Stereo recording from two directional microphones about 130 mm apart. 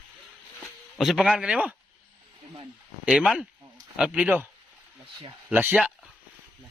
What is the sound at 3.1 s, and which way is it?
Speech, 5° right (ahead or behind).